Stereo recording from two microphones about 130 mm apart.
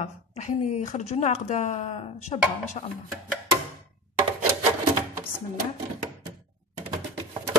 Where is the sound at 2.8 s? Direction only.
50° left (ahead or behind).